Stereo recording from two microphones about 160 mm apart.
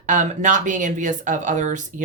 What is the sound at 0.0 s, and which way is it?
Speech, 55° right (ahead or behind).